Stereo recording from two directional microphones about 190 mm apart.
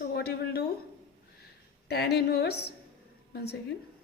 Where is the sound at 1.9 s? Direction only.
55° left (ahead or behind).